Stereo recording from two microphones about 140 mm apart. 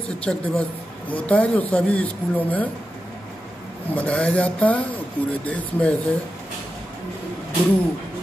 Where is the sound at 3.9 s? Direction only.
10° left (ahead or behind).